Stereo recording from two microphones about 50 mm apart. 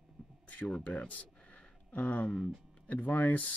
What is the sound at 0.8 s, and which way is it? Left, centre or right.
Speech, left.